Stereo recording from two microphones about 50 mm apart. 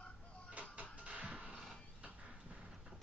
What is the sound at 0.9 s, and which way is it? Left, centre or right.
Music, right.